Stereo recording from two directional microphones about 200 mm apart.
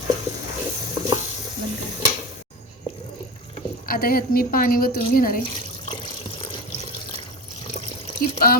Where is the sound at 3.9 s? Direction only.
45° left (ahead or behind).